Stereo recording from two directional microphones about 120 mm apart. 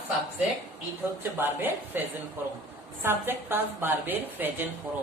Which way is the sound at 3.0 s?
20° right (ahead or behind).